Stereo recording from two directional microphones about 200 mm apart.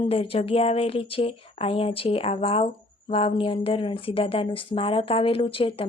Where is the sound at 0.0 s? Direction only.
30° left (ahead or behind).